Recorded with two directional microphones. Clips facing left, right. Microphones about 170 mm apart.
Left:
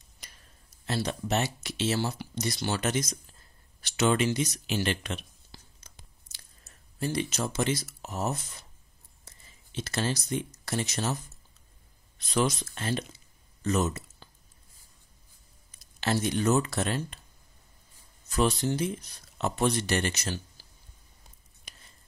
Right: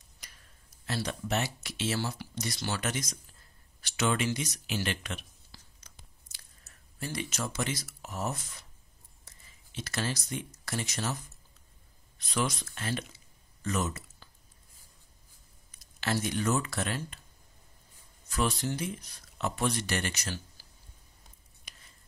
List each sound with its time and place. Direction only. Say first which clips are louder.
0.8 s speech: left 3 dB; 25° left (ahead or behind)
7.0 s speech: left 6 dB; 25° left (ahead or behind)
12.4 s speech: left 5 dB; 30° left (ahead or behind)
16.0 s speech: left 4 dB; 25° left (ahead or behind)
18.3 s speech: left 5 dB; 25° left (ahead or behind)